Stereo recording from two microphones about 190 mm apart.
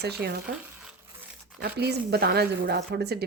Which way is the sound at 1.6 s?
60° right (ahead or behind).